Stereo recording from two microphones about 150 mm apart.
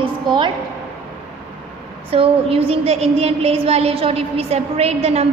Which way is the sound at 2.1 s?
40° right (ahead or behind).